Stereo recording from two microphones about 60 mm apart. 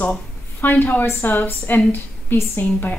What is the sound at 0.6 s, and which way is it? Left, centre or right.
A woman's voice, left.